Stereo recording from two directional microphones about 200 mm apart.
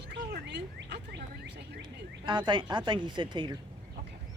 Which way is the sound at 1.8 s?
20° right (ahead or behind).